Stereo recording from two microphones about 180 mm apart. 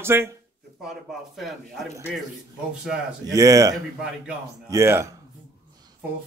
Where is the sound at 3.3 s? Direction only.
20° right (ahead or behind).